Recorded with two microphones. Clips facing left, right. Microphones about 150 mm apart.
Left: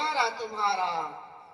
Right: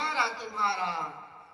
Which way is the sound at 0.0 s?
30° left (ahead or behind).